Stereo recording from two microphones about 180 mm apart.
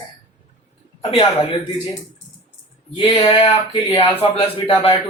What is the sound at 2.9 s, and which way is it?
Speech, 30° left (ahead or behind).